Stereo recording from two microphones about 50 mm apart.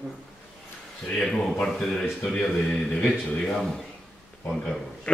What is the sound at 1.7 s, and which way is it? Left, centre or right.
Speech, centre.